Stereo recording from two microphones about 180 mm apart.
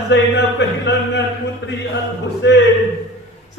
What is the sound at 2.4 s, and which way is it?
Speech, 80° left.